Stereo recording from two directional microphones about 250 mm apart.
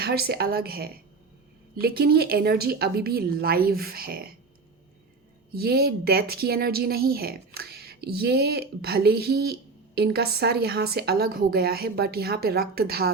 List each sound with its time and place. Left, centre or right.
0.0 s speech: right
5.5 s speech: right